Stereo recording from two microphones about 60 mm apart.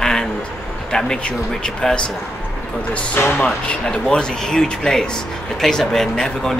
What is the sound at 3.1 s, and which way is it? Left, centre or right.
Speech, left.